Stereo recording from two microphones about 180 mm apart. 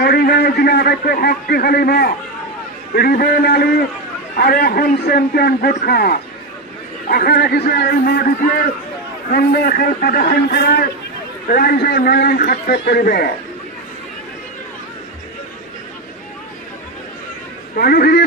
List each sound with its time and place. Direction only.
0.0 s a man's voice: 60° left (ahead or behind)
9.3 s a man's voice: 55° left (ahead or behind)
17.7 s a man's voice: 55° left (ahead or behind)